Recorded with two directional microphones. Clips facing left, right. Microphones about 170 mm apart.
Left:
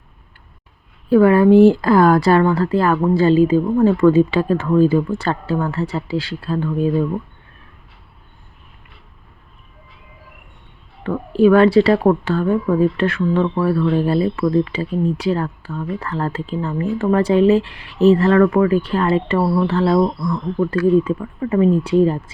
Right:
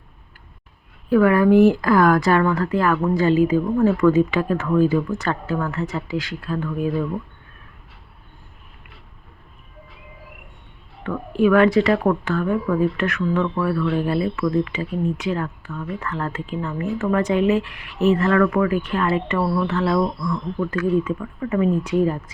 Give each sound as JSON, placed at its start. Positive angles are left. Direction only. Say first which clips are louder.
{"t": 1.1, "sound": "a woman's voice", "louder": "left 4 dB", "side_deg": 30}
{"t": 11.0, "sound": "speech", "louder": "left 5 dB", "side_deg": 30}